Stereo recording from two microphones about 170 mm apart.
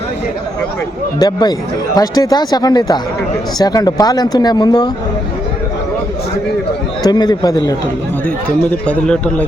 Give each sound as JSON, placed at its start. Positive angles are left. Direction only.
{"t": 1.2, "sound": "speech", "side_deg": 25}
{"t": 7.0, "sound": "speech", "side_deg": 25}
{"t": 8.7, "sound": "a man's voice", "side_deg": 10}